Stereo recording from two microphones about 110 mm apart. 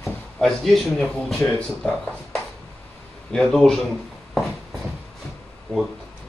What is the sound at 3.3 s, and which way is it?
Speech, 5° left (ahead or behind).